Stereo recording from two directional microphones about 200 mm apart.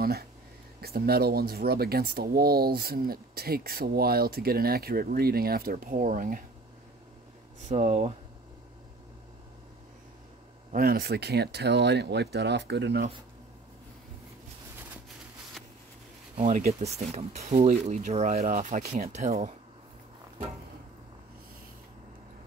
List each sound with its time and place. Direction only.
0.0 s speech: 50° right (ahead or behind)
7.6 s speech: 35° right (ahead or behind)
10.7 s speech: 50° right (ahead or behind)
15.6 s a sound: centre (ahead or behind)
16.3 s speech: 35° right (ahead or behind)